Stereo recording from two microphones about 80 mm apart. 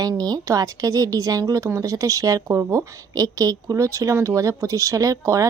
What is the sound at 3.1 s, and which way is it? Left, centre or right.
A woman's voice, right.